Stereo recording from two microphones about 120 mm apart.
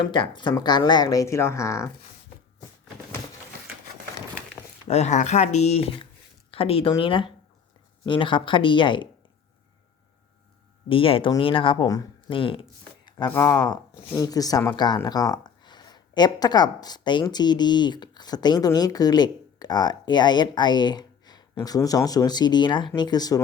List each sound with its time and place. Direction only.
0.1 s speech: 40° left (ahead or behind); by 1.9 s 25° left (ahead or behind)
4.9 s speech: 70° left (ahead or behind); by 9.0 s 40° left (ahead or behind)
10.8 s speech: 50° left (ahead or behind)
13.1 s a sound: 35° left (ahead or behind)
13.3 s speech: 25° left (ahead or behind)